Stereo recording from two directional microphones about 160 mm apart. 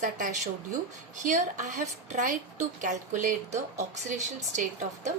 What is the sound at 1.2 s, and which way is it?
A woman's voice, 50° right (ahead or behind).